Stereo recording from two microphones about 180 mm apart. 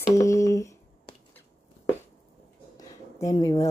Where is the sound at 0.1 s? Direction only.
15° left (ahead or behind).